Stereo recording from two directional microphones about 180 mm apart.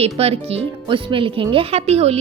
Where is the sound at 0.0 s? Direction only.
35° right (ahead or behind).